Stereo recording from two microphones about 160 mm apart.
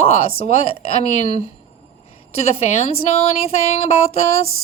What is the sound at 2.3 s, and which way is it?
A woman's voice, 40° left (ahead or behind).